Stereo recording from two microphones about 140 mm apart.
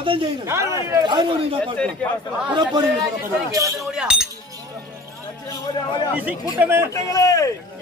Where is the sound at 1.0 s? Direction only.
35° right (ahead or behind).